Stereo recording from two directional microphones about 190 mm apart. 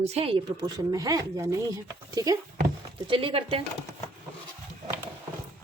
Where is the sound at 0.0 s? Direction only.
30° right (ahead or behind).